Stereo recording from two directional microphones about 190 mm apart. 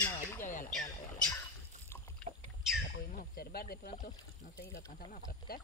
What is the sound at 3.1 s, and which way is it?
Speech, 55° left (ahead or behind).